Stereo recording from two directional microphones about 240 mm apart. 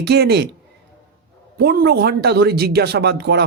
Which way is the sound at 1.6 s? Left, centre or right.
Right.